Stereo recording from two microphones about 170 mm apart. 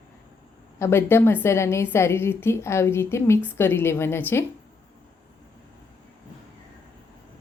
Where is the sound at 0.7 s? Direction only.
15° left (ahead or behind).